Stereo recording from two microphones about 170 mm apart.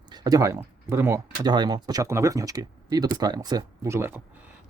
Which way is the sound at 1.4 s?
25° right (ahead or behind).